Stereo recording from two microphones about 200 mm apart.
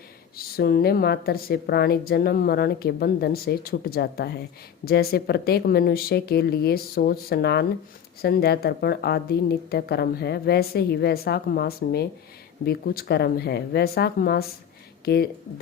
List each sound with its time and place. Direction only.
0.3 s a woman's voice: 50° left (ahead or behind)